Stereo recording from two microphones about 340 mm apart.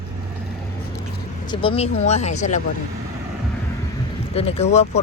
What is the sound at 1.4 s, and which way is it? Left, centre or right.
Speech, centre.